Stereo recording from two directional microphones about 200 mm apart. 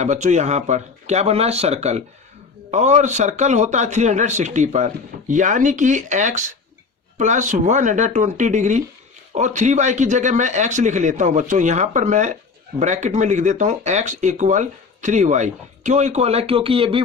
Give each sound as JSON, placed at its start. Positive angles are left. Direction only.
{"t": 0.0, "sound": "speech", "side_deg": -35}